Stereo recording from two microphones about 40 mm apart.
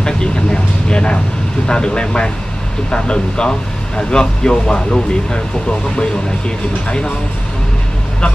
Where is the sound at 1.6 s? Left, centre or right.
Left.